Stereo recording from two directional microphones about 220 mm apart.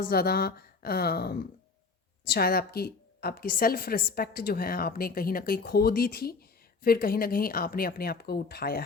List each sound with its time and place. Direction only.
0.0 s a woman's voice: 45° left (ahead or behind)